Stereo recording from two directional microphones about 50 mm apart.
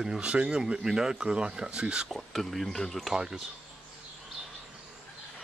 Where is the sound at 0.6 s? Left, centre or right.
Centre.